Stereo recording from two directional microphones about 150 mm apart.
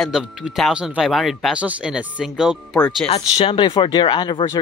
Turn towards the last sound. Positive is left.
turn(degrees=30)  # may be behind; listen again after turning